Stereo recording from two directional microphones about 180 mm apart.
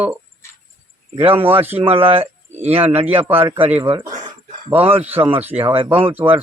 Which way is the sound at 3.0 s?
10° right (ahead or behind).